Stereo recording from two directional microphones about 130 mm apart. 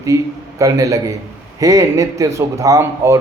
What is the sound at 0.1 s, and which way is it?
Speech, 25° right (ahead or behind).